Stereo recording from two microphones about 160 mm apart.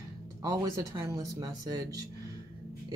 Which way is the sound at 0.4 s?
20° right (ahead or behind).